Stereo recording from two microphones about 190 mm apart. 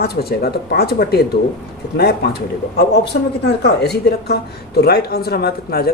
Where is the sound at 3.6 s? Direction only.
60° left (ahead or behind).